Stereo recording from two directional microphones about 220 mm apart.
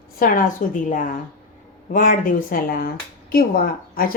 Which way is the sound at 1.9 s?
35° left (ahead or behind).